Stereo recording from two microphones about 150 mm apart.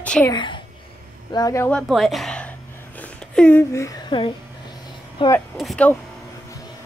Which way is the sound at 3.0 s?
10° left (ahead or behind).